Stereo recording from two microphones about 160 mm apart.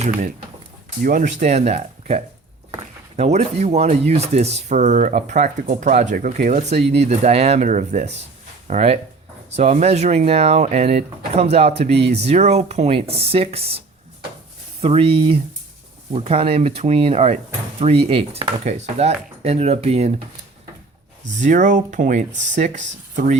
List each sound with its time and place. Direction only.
1.0 s speech: 50° right (ahead or behind)
21.3 s speech: 50° right (ahead or behind)